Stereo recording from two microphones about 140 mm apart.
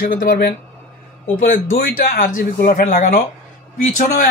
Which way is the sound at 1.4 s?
90° left.